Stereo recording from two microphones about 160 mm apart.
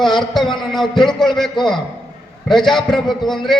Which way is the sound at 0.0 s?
Centre (ahead or behind).